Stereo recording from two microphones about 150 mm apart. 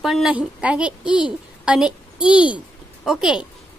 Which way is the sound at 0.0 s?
Centre (ahead or behind).